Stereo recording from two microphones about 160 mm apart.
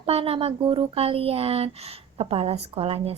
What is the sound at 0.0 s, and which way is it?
Speech, 35° right (ahead or behind).